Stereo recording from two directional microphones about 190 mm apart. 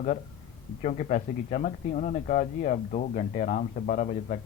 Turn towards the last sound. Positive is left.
turn(degrees=40)  # may be behind; listen again after turning